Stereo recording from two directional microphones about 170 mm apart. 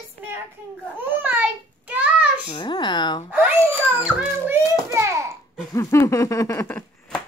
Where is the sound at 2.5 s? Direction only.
25° left (ahead or behind).